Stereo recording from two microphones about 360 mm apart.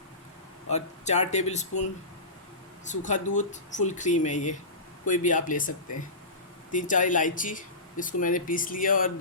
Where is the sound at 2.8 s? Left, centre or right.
Centre.